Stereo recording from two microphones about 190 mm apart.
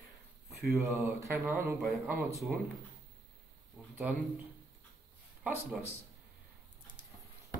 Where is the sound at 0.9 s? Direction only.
15° right (ahead or behind).